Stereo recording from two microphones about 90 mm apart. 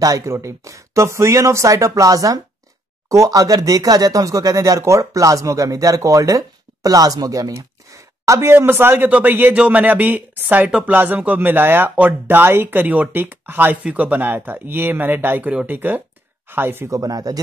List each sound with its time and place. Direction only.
0.0 s speech: 35° right (ahead or behind)
16.9 s speech: 40° right (ahead or behind)